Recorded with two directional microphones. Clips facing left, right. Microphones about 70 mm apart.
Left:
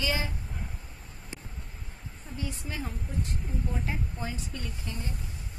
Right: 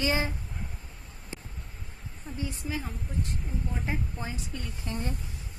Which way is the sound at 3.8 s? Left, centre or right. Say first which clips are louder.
Right 1 dB; right.